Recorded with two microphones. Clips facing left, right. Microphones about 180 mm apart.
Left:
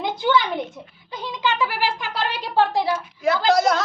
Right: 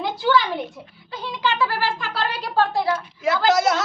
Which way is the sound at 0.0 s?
20° left (ahead or behind).